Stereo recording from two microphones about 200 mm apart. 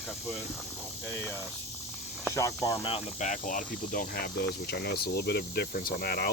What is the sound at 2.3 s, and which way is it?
Speech, 15° left (ahead or behind).